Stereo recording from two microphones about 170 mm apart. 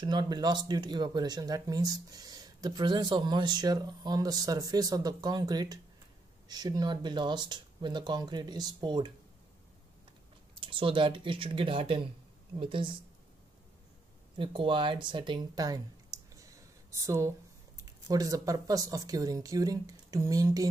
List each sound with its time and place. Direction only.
0.0 s speech: 25° right (ahead or behind)
10.5 s speech: 30° right (ahead or behind)
14.3 s speech: 30° right (ahead or behind)